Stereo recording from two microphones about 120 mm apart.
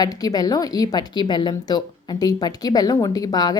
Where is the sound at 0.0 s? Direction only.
30° left (ahead or behind).